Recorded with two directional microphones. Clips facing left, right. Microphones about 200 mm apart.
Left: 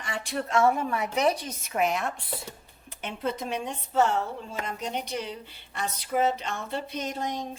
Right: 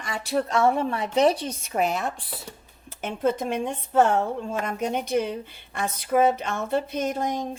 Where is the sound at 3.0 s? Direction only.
50° right (ahead or behind).